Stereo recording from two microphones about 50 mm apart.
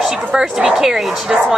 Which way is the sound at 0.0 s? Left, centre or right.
Centre.